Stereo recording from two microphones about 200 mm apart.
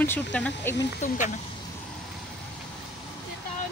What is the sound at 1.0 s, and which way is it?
Speech, 35° left (ahead or behind).